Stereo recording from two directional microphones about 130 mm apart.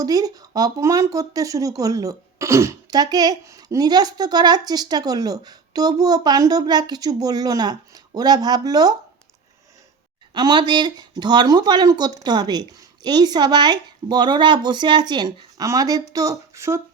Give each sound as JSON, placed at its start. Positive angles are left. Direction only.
{"t": 0.0, "sound": "speech", "side_deg": -30}
{"t": 10.3, "sound": "speech", "side_deg": -35}